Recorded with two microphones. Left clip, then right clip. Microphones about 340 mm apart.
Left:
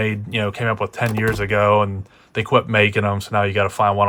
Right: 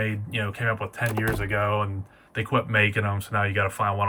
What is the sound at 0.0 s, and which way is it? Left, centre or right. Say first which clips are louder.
Speech: left 7 dB; centre.